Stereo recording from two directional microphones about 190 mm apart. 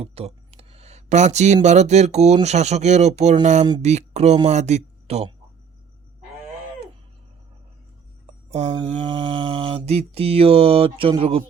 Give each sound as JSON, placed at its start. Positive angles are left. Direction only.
{"t": 0.0, "sound": "a sound", "side_deg": -30}
{"t": 1.6, "sound": "speech", "side_deg": -35}
{"t": 8.4, "sound": "speech", "side_deg": -35}
{"t": 8.7, "sound": "mantra", "side_deg": -25}